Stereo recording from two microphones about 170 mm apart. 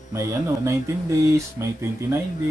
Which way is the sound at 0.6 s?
15° right (ahead or behind).